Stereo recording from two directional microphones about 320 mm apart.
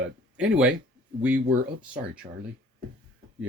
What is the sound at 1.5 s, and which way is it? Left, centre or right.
Speech, right.